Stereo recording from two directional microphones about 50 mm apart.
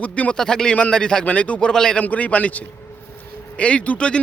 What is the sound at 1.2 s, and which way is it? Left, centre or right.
Speech, left.